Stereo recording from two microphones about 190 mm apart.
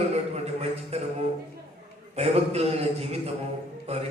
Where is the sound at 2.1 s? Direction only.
35° right (ahead or behind).